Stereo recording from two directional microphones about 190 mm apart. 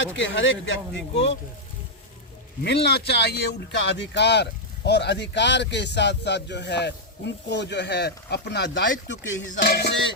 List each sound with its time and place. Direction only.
0.0 s speech: 75° left (ahead or behind)
2.6 s a man's voice: 60° left (ahead or behind)